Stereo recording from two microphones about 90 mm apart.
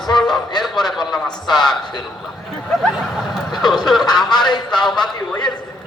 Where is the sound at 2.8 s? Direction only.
Centre (ahead or behind).